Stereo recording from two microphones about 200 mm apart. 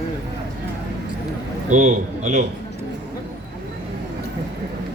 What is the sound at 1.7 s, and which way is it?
Speech, 35° right (ahead or behind).